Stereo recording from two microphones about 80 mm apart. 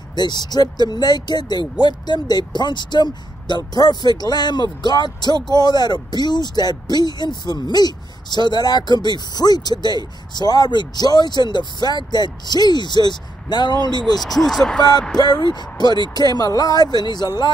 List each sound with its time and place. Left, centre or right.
0.1 s speech: left
14.2 s speech: centre
15.1 s speech: left